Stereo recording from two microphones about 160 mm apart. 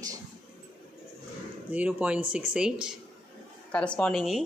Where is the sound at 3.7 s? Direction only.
5° left (ahead or behind).